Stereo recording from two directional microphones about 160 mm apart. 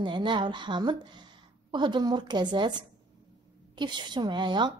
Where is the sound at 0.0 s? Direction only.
30° right (ahead or behind).